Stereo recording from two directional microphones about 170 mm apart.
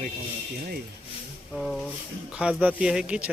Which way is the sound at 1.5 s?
Centre (ahead or behind).